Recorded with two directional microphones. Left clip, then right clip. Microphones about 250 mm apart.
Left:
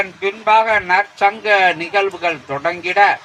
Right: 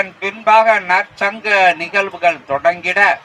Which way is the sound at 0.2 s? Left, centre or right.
Right.